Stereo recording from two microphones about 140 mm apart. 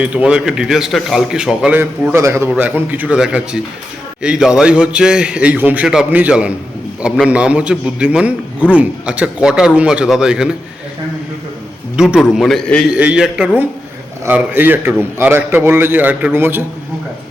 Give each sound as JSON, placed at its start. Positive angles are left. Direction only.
{"t": 0.0, "sound": "speech", "side_deg": -10}
{"t": 1.8, "sound": "a man's voice", "side_deg": -20}
{"t": 11.9, "sound": "speech", "side_deg": -5}
{"t": 12.9, "sound": "a man's voice", "side_deg": -10}